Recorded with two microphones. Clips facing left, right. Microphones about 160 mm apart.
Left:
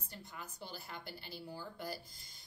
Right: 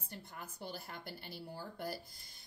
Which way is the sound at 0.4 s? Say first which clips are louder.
Right 3 dB; 55° right (ahead or behind).